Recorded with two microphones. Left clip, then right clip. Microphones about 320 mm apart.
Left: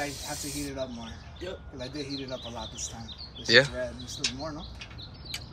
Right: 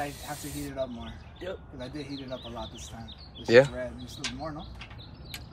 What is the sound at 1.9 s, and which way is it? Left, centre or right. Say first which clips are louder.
Speech: left 4 dB; right.